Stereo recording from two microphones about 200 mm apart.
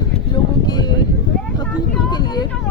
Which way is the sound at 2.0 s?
20° left (ahead or behind).